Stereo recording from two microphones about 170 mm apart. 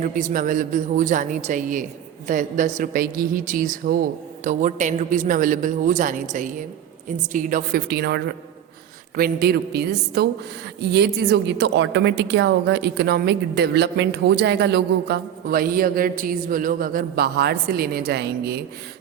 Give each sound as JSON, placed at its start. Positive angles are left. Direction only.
{"t": 0.0, "sound": "a woman's voice", "side_deg": -50}